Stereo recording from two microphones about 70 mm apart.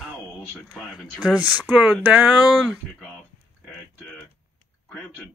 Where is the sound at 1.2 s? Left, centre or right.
Right.